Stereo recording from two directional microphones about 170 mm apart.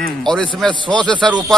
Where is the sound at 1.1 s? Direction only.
25° right (ahead or behind).